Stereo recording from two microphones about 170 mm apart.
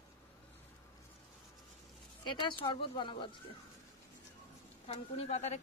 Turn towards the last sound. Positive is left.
turn(degrees=40)  # may be behind; listen again after turning